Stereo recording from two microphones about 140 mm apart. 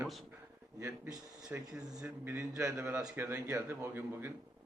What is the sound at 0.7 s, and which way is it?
Speech, 20° right (ahead or behind).